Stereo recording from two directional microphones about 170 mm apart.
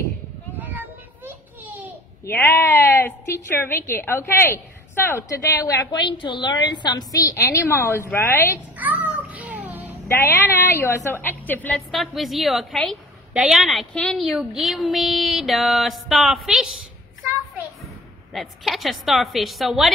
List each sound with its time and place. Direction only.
0.6 s children playing: 10° right (ahead or behind)
2.2 s a woman's voice: 10° left (ahead or behind)
8.7 s music: 10° right (ahead or behind)
10.0 s a woman's voice: 15° left (ahead or behind)
11.9 s a woman's voice: centre (ahead or behind)
18.3 s a woman's voice: centre (ahead or behind)